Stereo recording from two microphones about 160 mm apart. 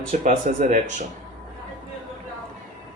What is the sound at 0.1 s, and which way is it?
Speech, 55° right (ahead or behind).